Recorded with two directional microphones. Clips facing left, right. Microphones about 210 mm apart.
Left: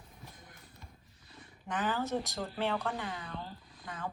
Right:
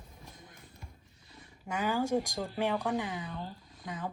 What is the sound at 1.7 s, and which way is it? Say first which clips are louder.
Speech: right 3 dB; 10° right (ahead or behind).